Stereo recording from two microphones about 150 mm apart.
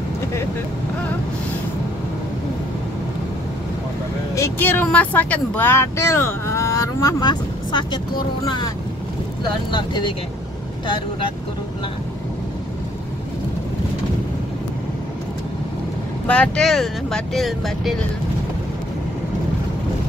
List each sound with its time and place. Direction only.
4.4 s speech: 15° left (ahead or behind); by 11.3 s 35° left (ahead or behind)
16.3 s speech: 5° left (ahead or behind)